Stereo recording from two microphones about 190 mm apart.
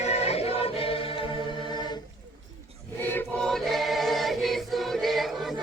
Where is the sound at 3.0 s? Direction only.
5° left (ahead or behind).